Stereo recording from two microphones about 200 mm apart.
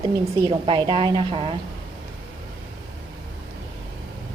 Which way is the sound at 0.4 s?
25° right (ahead or behind).